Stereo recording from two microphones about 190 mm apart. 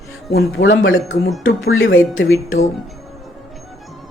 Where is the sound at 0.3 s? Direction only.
60° left (ahead or behind); by 2.0 s 90° left.